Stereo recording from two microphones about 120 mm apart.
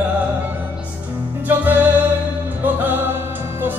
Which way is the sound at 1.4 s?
15° right (ahead or behind).